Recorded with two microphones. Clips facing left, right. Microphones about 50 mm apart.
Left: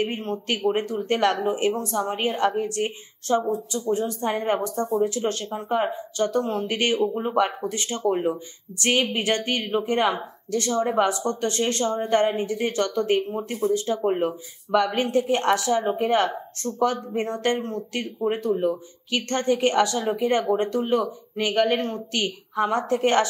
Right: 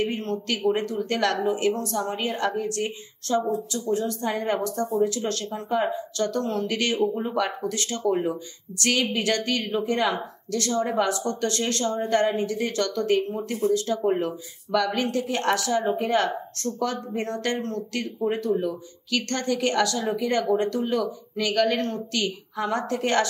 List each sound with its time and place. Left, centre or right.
0.0 s a woman's voice: left